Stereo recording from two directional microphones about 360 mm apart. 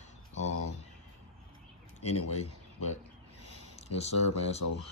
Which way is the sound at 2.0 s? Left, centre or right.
Left.